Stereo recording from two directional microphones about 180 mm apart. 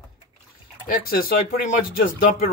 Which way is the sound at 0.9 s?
55° left (ahead or behind).